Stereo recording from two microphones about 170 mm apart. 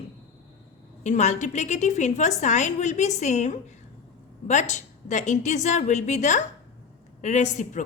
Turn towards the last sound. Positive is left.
turn(degrees=45)  # may be behind; listen again after turning